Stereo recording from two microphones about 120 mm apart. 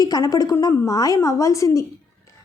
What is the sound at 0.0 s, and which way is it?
Speech, 30° left (ahead or behind).